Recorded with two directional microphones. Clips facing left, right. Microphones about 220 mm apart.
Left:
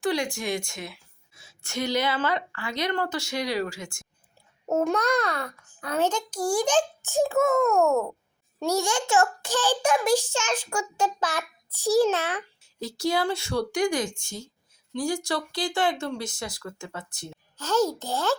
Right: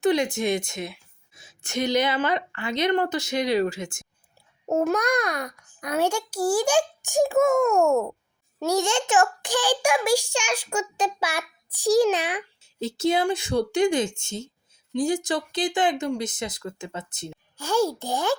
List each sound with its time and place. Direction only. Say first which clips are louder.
0.0 s a woman's voice: right 5 dB; 20° right (ahead or behind)
4.7 s a child's voice: right 1 dB; 5° right (ahead or behind)